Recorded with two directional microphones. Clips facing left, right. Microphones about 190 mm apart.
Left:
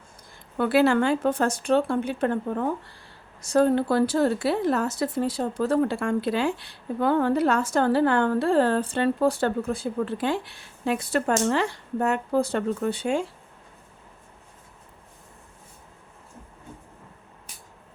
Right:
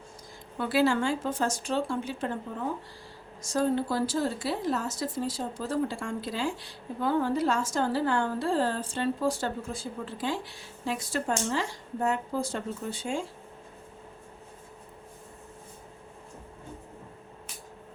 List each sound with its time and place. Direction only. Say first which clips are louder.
0.5 s a woman's voice: left 5 dB; 60° left (ahead or behind)